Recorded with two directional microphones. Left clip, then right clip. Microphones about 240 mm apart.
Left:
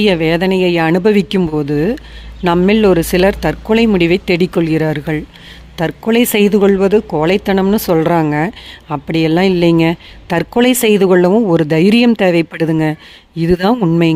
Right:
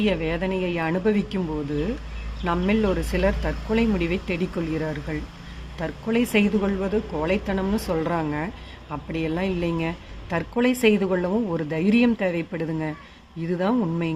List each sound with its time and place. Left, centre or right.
0.0 s speech: left